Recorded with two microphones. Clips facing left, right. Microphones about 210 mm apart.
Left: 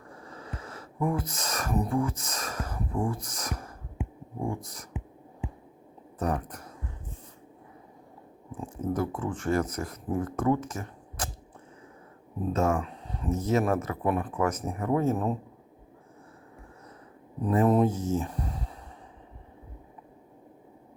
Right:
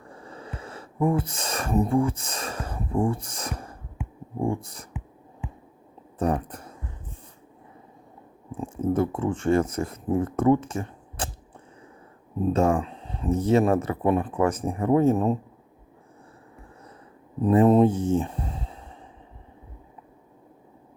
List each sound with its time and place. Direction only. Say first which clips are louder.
0.1 s speech: right 2 dB; 30° right (ahead or behind)
6.1 s speech: right 5 dB; 30° right (ahead or behind)
8.6 s speech: right 6 dB; 25° right (ahead or behind)
12.5 s speech: right 3 dB; 30° right (ahead or behind)
17.4 s speech: right 5 dB; 25° right (ahead or behind)